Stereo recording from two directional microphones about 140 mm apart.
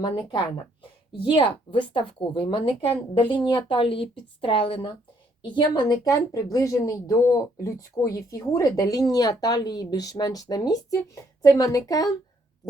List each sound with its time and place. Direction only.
0.0 s a woman's voice: 35° left (ahead or behind)